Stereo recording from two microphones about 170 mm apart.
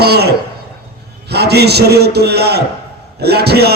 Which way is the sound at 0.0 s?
70° right (ahead or behind).